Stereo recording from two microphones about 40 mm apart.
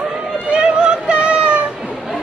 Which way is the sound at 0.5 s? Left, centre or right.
Right.